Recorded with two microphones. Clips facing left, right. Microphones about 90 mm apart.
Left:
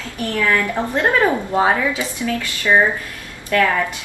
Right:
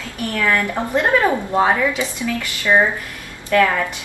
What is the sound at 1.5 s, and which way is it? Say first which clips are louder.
Speech: even; 15° left (ahead or behind).